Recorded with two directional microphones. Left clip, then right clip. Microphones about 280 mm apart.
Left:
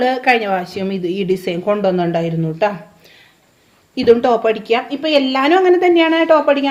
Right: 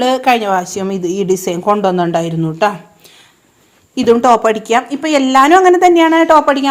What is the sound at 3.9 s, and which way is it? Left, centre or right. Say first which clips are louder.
A woman's voice: right 3 dB; right.